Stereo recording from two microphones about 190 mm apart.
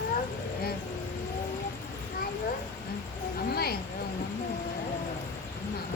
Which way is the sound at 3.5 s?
55° left (ahead or behind).